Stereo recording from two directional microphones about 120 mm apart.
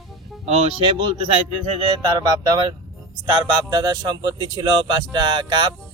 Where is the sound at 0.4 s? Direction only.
60° right (ahead or behind).